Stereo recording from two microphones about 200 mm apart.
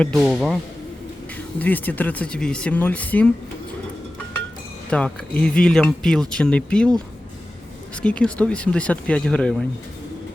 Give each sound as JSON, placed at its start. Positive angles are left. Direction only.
{"t": 0.0, "sound": "speech", "side_deg": 0}
{"t": 4.9, "sound": "speech", "side_deg": 5}
{"t": 8.0, "sound": "speech", "side_deg": 5}